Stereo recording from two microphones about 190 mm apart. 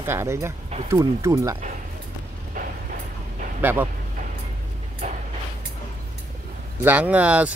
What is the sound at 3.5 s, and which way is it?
Speech, 10° right (ahead or behind).